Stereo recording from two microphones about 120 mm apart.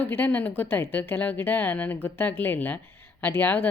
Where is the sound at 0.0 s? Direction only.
15° left (ahead or behind).